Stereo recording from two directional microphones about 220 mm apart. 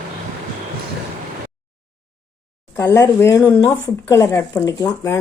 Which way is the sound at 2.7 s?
15° left (ahead or behind).